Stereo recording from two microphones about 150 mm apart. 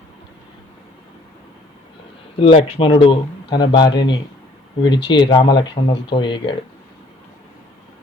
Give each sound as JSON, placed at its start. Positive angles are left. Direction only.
{"t": 2.3, "sound": "speech", "side_deg": 35}